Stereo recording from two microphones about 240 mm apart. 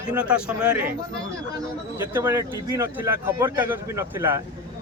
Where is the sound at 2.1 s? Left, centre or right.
Centre.